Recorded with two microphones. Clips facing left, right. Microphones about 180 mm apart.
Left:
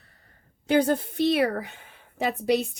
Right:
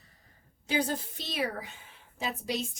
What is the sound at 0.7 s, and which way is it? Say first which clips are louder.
A woman's voice: left 9 dB; 60° left (ahead or behind).